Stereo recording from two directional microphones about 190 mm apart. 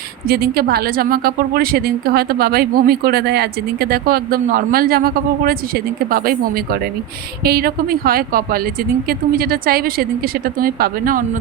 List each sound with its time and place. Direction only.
0.3 s a woman's voice: 55° right (ahead or behind)